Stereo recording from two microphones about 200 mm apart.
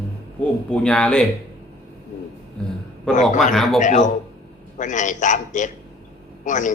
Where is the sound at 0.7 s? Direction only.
5° left (ahead or behind).